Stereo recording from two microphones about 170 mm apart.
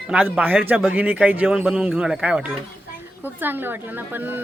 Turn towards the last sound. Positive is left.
turn(degrees=-10)  # may be behind; listen again after turning